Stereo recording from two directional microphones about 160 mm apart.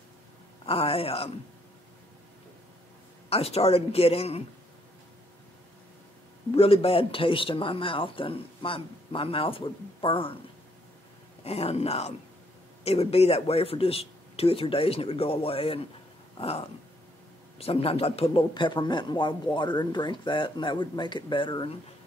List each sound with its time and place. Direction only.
0.7 s speech: 35° left (ahead or behind)
3.3 s speech: 40° left (ahead or behind)
6.5 s speech: 35° left (ahead or behind)
11.4 s speech: 40° left (ahead or behind)
16.3 s dog: 35° left (ahead or behind)
17.6 s speech: 40° left (ahead or behind)